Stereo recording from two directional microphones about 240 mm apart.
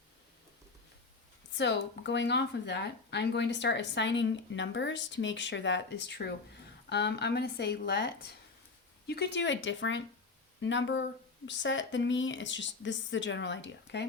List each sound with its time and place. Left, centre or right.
1.5 s speech: left